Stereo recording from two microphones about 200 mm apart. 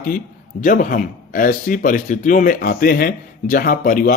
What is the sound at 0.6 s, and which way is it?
Speech, 40° left (ahead or behind).